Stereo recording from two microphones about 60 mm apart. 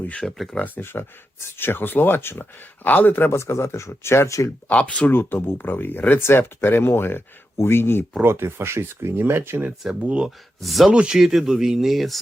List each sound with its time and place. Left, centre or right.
0.3 s speech: centre
0.6 s speech: left
4.7 s speech: centre
5.1 s speech: left
8.2 s speech: right
10.0 s speech: centre
10.2 s speech: centre
10.9 s speech: centre